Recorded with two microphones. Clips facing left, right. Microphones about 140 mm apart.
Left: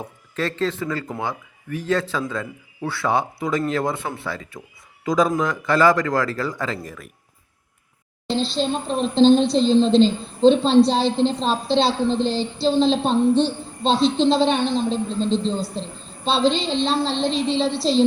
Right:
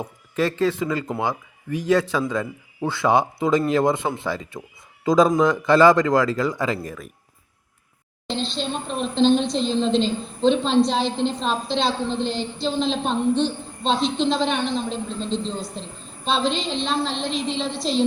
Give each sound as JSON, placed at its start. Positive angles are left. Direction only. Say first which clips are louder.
{"t": 0.3, "sound": "a man's voice", "louder": "right 3 dB", "side_deg": -10}
{"t": 8.4, "sound": "child singing", "louder": "left 4 dB", "side_deg": 35}